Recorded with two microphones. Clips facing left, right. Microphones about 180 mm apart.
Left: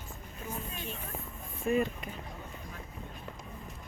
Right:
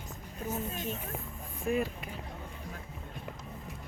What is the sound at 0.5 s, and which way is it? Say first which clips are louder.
Speech: right 5 dB; 45° right (ahead or behind).